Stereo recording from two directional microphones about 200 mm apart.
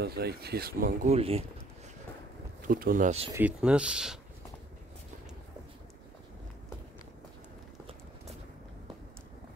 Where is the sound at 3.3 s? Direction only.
5° right (ahead or behind).